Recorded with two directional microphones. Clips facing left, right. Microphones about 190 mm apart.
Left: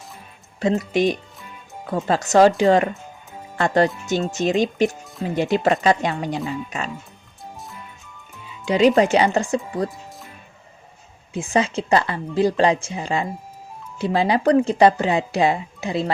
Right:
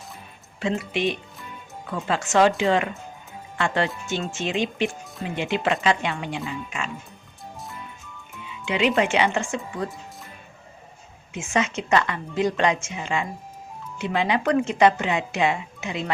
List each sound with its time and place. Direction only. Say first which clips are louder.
0.6 s speech: left 6 dB; 40° left (ahead or behind)
7.5 s music: right 1 dB; centre (ahead or behind)
8.6 s speech: left 6 dB; 35° left (ahead or behind)
11.3 s speech: left 4 dB; 35° left (ahead or behind)